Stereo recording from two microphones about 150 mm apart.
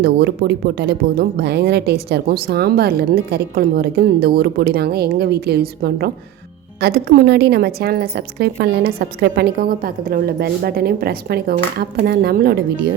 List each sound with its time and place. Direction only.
0.0 s speech: 90° right